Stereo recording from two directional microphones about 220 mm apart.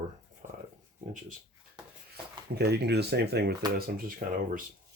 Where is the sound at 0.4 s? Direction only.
35° right (ahead or behind).